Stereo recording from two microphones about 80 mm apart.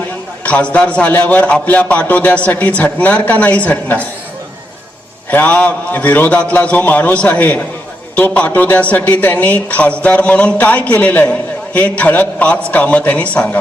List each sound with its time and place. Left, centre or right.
0.4 s a man's voice: centre
5.3 s a man's voice: centre